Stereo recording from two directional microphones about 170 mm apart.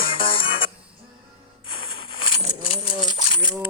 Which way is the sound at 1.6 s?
30° left (ahead or behind).